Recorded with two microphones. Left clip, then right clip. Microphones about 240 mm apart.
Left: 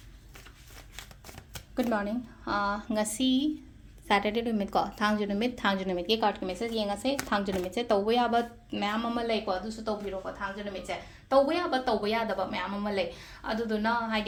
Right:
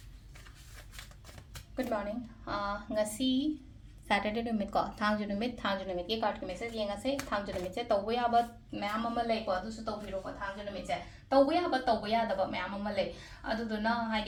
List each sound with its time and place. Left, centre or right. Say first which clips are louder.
1.5 s shuffling cards: left 5 dB; left
2.4 s a woman's voice: left 6 dB; left